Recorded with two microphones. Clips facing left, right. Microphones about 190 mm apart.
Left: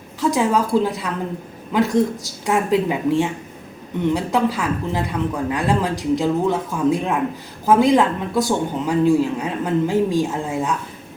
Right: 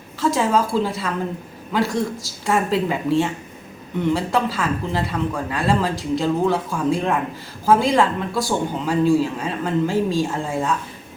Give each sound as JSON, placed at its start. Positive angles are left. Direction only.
{"t": 0.2, "sound": "speech", "side_deg": 15}